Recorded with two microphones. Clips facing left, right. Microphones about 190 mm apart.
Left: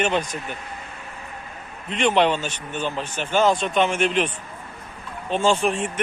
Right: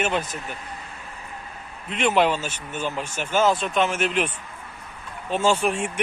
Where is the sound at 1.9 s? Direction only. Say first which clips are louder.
Left 1 dB; 5° right (ahead or behind).